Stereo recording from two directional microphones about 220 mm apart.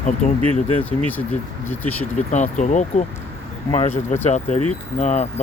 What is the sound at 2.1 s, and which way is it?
Speech, 35° left (ahead or behind).